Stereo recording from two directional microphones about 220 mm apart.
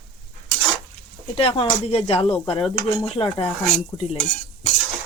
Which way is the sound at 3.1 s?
25° left (ahead or behind).